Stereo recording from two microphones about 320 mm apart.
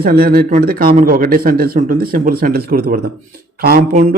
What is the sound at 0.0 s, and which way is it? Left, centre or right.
A man's voice, right.